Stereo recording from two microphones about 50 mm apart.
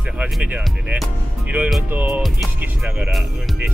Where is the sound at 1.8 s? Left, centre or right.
Right.